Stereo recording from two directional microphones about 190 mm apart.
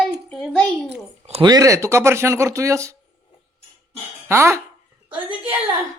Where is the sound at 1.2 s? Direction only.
30° right (ahead or behind).